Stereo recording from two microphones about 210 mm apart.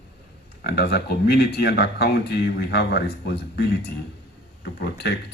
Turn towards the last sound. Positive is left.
turn(degrees=50)  # may be behind; listen again after turning